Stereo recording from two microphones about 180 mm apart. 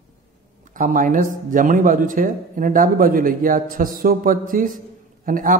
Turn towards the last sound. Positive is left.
turn(degrees=-50)  # may be behind; listen again after turning